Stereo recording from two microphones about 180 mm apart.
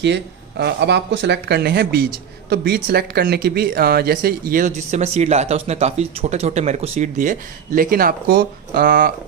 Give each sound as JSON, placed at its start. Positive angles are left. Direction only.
{"t": 0.0, "sound": "speech", "side_deg": -70}